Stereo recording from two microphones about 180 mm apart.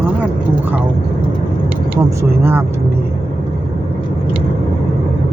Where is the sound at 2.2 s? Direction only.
15° right (ahead or behind).